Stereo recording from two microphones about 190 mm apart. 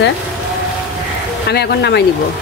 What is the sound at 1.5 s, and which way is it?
Speech, 60° left (ahead or behind).